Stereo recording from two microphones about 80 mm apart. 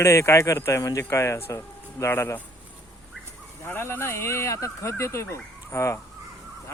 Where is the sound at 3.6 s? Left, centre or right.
Left.